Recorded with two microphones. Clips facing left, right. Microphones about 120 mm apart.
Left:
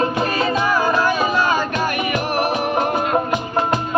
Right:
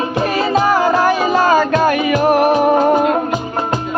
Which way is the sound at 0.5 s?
90° right.